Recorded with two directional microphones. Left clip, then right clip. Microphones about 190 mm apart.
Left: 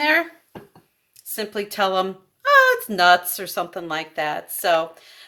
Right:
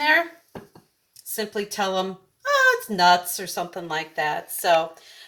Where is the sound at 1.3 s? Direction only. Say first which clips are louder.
Left 1 dB; 40° left (ahead or behind).